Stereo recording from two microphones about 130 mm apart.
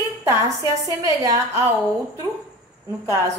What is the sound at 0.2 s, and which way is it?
A woman's voice, 25° right (ahead or behind).